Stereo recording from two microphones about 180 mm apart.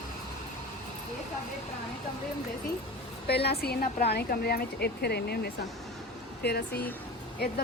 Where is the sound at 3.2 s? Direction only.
65° left (ahead or behind).